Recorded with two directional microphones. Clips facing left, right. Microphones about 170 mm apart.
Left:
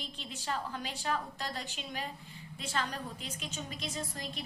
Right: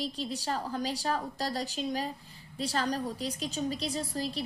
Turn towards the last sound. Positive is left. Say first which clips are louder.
# right 7 dB
turn(degrees=-35)  # may be behind; listen again after turning